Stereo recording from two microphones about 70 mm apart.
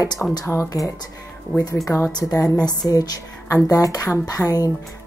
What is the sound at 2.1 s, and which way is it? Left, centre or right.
Speech, left.